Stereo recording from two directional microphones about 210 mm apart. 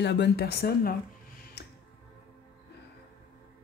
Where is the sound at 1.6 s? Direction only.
50° left (ahead or behind).